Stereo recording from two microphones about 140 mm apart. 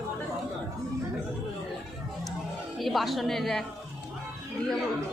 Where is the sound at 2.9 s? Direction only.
Centre (ahead or behind).